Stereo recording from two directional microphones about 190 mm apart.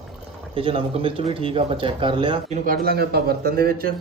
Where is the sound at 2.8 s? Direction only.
55° right (ahead or behind).